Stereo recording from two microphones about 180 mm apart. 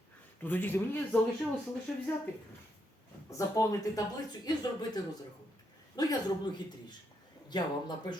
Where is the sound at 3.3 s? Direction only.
20° left (ahead or behind).